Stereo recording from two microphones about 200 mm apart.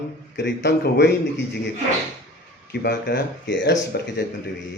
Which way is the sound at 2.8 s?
55° left (ahead or behind).